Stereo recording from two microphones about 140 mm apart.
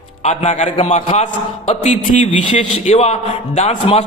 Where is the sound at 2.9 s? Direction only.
50° left (ahead or behind).